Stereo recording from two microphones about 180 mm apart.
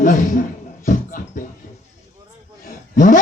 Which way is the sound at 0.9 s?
45° left (ahead or behind).